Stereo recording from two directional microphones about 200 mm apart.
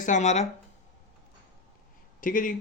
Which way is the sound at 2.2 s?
40° left (ahead or behind).